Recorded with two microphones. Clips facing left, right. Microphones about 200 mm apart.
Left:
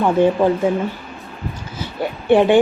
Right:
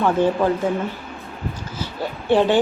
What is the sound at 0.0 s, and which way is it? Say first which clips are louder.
Speech: left 3 dB; 15° left (ahead or behind).